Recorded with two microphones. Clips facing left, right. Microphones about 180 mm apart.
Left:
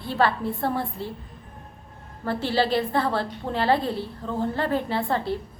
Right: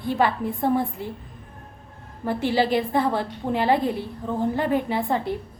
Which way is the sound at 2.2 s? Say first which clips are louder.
Right 2 dB; 15° right (ahead or behind).